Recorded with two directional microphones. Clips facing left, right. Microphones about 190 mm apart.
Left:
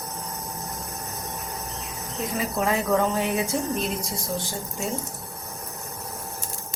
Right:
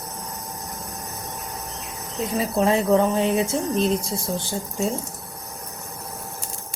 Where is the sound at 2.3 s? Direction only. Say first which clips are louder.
Right 5 dB; 30° right (ahead or behind).